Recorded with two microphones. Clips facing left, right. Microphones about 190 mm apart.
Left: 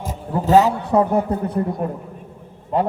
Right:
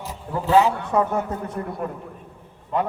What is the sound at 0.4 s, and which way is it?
A man's voice, 40° left (ahead or behind).